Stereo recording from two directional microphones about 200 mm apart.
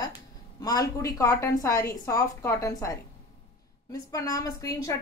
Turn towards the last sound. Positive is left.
turn(degrees=15)  # may be behind; listen again after turning